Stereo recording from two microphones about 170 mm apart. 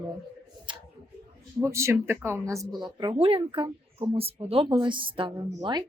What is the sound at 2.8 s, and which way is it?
Speech, 30° right (ahead or behind).